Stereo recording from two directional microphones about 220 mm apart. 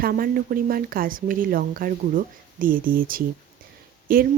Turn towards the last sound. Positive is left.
turn(degrees=-40)  # may be behind; listen again after turning